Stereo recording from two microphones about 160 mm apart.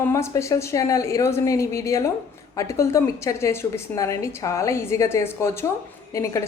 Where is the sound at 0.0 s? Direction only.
15° left (ahead or behind).